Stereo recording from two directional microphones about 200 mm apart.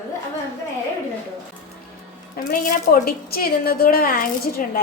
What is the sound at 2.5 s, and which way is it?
A woman's voice, 45° left (ahead or behind).